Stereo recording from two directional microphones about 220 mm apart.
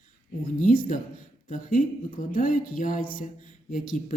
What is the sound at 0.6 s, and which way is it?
Speech, 40° left (ahead or behind).